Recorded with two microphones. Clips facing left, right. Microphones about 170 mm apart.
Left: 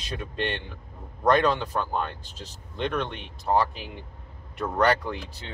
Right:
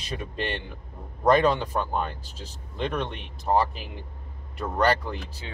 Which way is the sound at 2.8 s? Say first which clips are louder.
Left 1 dB; 5° right (ahead or behind).